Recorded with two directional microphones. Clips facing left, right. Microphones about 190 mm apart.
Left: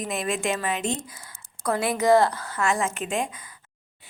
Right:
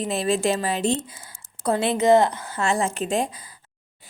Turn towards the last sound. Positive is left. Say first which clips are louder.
# right 4 dB
turn(degrees=-35)  # may be behind; listen again after turning